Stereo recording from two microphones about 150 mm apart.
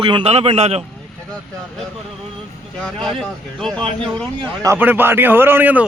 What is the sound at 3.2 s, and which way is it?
Speech, 5° left (ahead or behind).